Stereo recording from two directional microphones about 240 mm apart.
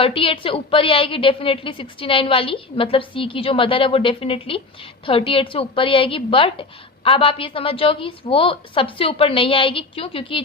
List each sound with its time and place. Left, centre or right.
0.0 s a woman's voice: left